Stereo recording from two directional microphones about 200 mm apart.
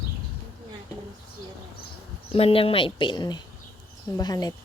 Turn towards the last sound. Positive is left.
turn(degrees=20)  # may be behind; listen again after turning